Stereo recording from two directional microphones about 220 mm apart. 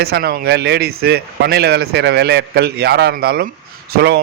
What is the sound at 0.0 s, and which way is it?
Speech, 45° right (ahead or behind).